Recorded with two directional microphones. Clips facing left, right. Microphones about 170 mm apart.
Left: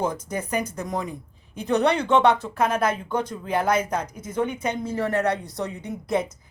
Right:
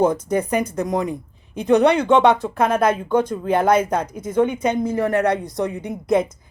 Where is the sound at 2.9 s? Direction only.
55° right (ahead or behind).